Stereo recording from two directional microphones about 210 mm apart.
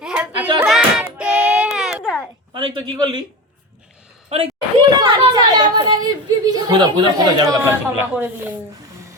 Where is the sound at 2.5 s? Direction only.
20° right (ahead or behind).